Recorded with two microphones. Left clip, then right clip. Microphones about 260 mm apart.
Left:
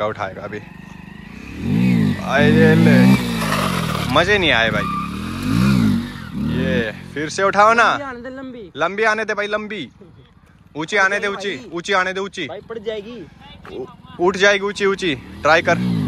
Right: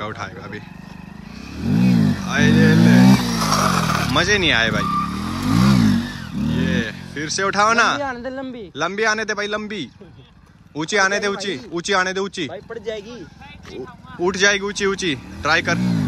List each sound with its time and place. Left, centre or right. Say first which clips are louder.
0.0 s speech: left 6 dB; centre
1.6 s vehicle: even; centre
4.1 s speech: left 3 dB; centre
5.9 s vehicle: right 1 dB; centre
8.7 s speech: left 2 dB; centre
12.4 s speech: left 2 dB; left
14.2 s speech: left 3 dB; centre